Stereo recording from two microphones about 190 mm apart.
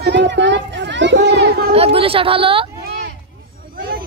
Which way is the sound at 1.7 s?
30° right (ahead or behind).